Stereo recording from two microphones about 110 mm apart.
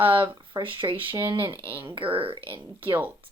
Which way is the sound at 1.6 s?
15° right (ahead or behind).